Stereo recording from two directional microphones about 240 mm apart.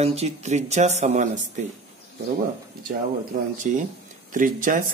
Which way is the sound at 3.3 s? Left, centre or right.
Right.